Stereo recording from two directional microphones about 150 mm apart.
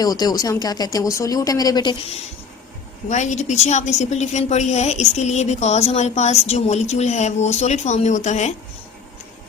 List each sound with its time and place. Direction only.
0.0 s speech: 25° left (ahead or behind)
3.1 s a woman's voice: 50° left (ahead or behind)